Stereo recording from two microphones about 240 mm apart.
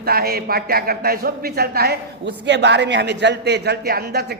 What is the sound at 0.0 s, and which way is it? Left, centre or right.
A man's voice, right.